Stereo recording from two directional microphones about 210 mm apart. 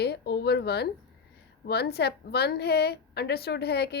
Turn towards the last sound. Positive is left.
turn(degrees=50)  # may be behind; listen again after turning